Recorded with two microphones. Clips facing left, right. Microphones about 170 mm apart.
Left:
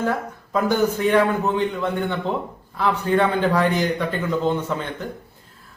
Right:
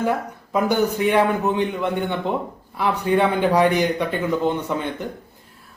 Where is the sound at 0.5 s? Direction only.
15° right (ahead or behind).